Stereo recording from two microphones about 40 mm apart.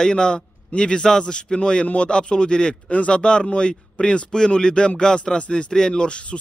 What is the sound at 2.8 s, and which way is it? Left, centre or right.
Speech, left.